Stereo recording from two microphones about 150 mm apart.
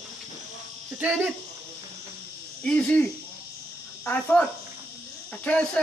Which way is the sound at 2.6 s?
5° left (ahead or behind).